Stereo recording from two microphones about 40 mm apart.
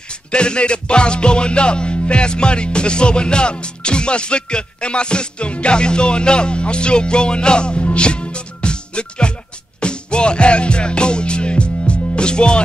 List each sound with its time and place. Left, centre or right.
0.3 s music: left